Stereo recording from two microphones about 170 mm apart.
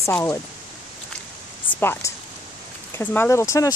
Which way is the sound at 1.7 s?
15° left (ahead or behind).